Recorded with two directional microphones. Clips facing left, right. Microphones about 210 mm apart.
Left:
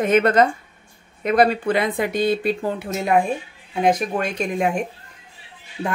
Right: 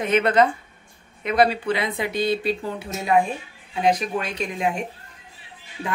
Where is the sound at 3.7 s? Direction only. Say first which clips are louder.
Left 2 dB; 50° left (ahead or behind).